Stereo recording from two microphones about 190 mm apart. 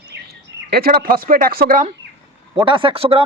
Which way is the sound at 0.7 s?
55° right (ahead or behind).